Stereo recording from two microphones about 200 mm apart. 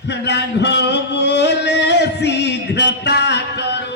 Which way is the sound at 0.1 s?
60° left (ahead or behind).